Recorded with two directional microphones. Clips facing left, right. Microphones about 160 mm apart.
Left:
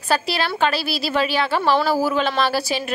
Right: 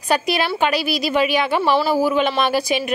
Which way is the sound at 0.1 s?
15° right (ahead or behind).